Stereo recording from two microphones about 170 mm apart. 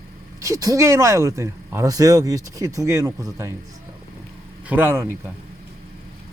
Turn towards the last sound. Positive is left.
turn(degrees=-15)  # may be behind; listen again after turning